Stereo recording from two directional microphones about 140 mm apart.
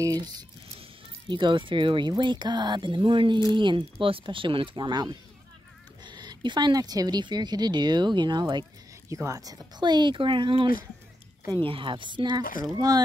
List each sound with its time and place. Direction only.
0.0 s speech: 25° right (ahead or behind)